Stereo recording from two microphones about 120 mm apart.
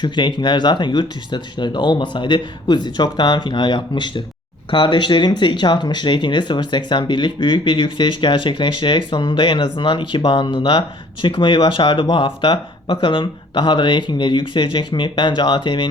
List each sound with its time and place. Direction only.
0.0 s speech: 40° left (ahead or behind)